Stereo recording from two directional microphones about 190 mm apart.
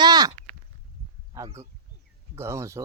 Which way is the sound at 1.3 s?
15° right (ahead or behind).